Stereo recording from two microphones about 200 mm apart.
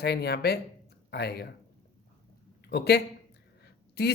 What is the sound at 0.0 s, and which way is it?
Speech, 55° left (ahead or behind).